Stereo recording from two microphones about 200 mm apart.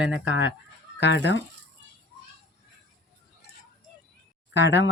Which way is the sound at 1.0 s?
60° left (ahead or behind).